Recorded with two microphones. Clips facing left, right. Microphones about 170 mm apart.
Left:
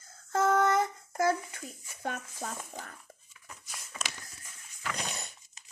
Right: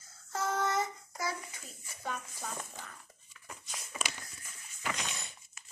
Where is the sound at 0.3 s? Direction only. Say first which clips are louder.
Left 7 dB; 55° left (ahead or behind).